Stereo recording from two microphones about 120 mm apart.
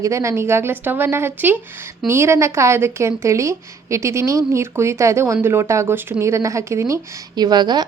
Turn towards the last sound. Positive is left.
turn(degrees=-35)  # may be behind; listen again after turning